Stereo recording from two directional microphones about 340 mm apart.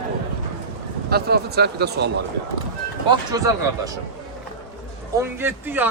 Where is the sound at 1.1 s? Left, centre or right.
Right.